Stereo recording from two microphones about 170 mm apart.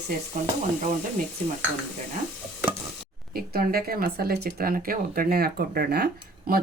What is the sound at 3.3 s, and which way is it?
Speech, 60° right (ahead or behind).